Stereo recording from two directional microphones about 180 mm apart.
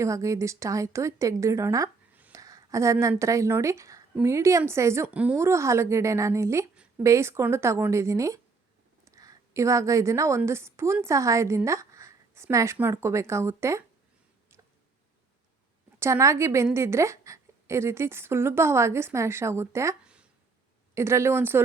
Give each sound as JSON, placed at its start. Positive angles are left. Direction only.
{"t": 0.0, "sound": "a woman's voice", "side_deg": -15}
{"t": 16.0, "sound": "a woman's voice", "side_deg": -15}